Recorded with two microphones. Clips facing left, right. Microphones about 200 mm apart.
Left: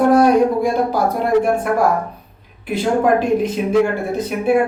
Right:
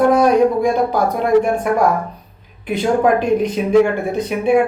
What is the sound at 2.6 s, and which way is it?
A woman's voice, centre (ahead or behind).